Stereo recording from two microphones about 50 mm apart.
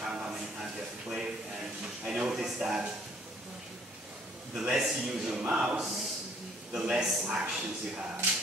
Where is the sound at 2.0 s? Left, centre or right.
Centre.